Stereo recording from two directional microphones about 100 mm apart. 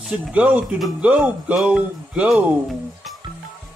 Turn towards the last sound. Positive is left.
turn(degrees=0)  # may be behind; listen again after turning